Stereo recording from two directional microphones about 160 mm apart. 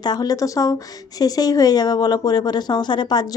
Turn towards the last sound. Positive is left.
turn(degrees=25)  # may be behind; listen again after turning